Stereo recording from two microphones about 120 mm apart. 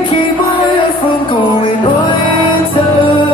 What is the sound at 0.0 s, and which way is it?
Music, 40° left (ahead or behind).